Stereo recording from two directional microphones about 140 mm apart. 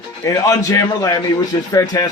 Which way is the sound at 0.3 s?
25° left (ahead or behind).